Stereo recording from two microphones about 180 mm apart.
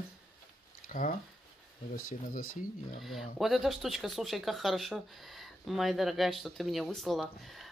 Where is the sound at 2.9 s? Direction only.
Centre (ahead or behind).